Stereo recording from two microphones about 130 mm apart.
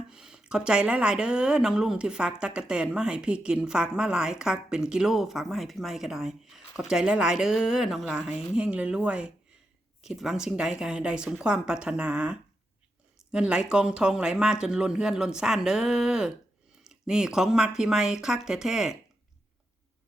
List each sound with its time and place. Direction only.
0.1 s a woman's voice: 5° right (ahead or behind)